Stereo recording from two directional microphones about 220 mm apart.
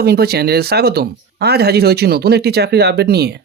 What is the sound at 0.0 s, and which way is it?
Speech, 45° right (ahead or behind).